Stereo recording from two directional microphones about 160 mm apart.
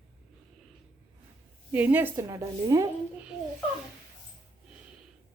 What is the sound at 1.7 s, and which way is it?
Speech, 10° right (ahead or behind).